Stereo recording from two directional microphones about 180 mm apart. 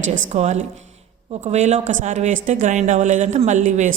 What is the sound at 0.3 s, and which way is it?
A man's voice, 40° right (ahead or behind).